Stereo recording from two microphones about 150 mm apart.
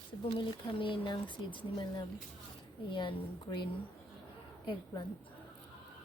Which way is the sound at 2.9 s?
30° left (ahead or behind).